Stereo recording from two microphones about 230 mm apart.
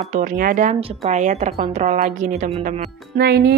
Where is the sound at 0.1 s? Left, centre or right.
Right.